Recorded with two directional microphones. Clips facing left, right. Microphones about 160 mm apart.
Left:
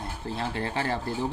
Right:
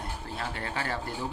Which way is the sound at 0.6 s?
30° left (ahead or behind).